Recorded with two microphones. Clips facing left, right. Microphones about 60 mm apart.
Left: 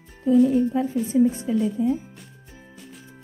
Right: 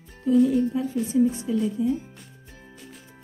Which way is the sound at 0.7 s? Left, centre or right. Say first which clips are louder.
Left 2 dB; left.